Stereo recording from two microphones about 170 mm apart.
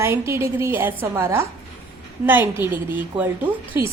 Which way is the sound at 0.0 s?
15° right (ahead or behind).